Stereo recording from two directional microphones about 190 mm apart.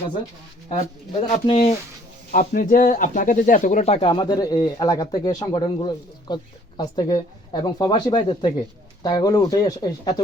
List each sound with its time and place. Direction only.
1.3 s speech: 30° left (ahead or behind)
2.3 s speech: 45° left (ahead or behind); by 10.2 s 20° left (ahead or behind)